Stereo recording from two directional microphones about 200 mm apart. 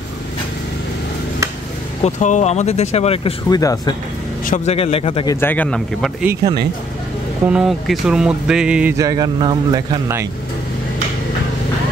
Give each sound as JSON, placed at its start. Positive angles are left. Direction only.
{"t": 2.0, "sound": "speech", "side_deg": 35}
{"t": 4.5, "sound": "speech", "side_deg": 30}
{"t": 6.2, "sound": "a man's voice", "side_deg": -20}
{"t": 7.5, "sound": "a sound", "side_deg": 0}
{"t": 8.9, "sound": "a man's voice", "side_deg": -15}